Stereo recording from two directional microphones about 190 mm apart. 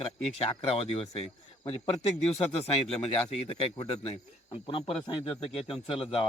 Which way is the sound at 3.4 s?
30° left (ahead or behind).